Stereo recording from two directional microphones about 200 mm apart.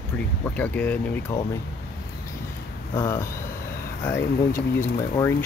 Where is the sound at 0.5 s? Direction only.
5° left (ahead or behind).